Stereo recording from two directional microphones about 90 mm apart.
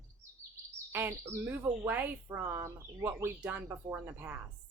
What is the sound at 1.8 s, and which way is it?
Speech, 20° right (ahead or behind).